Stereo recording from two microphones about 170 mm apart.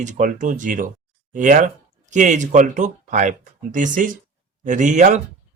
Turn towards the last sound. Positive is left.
turn(degrees=-45)  # may be behind; listen again after turning